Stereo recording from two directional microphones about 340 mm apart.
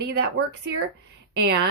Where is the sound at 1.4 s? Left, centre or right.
Right.